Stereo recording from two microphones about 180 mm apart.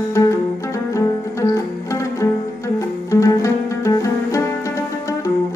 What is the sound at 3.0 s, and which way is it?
Music, 15° left (ahead or behind).